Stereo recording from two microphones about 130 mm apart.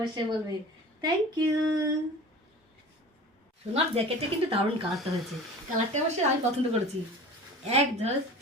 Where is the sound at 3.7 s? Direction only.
45° right (ahead or behind).